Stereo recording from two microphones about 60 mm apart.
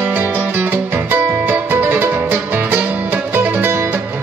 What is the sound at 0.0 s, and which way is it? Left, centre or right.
Music, right.